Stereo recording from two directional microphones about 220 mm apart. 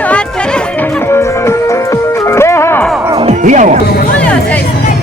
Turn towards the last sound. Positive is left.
turn(degrees=-35)  # may be behind; listen again after turning